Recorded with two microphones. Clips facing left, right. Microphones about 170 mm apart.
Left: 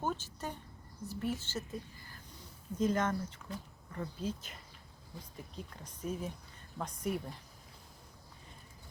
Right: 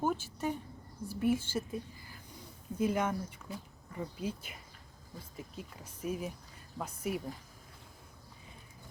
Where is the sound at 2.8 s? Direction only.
10° right (ahead or behind).